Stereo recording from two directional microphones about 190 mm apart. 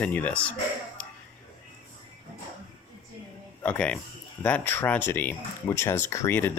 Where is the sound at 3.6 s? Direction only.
5° left (ahead or behind).